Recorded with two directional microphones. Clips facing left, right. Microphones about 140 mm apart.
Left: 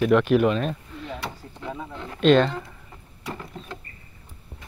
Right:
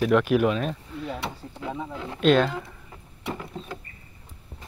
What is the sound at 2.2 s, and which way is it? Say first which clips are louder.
Speech: left 2 dB; 5° right (ahead or behind).